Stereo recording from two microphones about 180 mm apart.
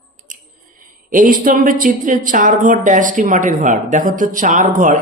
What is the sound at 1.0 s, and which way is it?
A woman's voice, 50° right (ahead or behind).